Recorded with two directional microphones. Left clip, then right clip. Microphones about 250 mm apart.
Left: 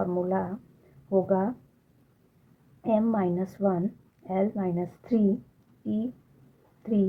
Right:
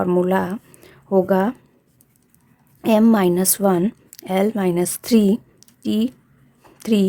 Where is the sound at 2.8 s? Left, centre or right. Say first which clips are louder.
Right 10 dB; right.